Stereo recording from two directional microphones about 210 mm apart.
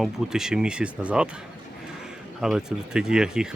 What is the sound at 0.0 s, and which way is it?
Speech, centre (ahead or behind).